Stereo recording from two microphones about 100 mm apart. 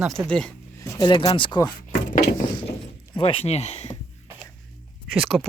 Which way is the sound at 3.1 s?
75° left (ahead or behind).